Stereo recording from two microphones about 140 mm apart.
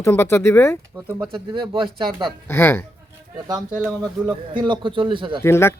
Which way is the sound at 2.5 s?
15° left (ahead or behind).